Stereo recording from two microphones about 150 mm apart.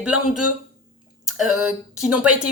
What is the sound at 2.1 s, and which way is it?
Speech, 5° right (ahead or behind).